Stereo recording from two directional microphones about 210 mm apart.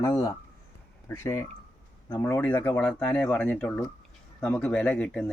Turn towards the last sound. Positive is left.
turn(degrees=5)  # may be behind; listen again after turning